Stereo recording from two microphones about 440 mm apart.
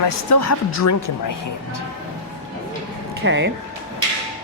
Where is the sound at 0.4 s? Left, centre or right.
Left.